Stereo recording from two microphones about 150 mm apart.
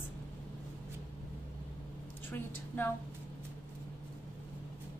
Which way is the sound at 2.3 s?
15° left (ahead or behind).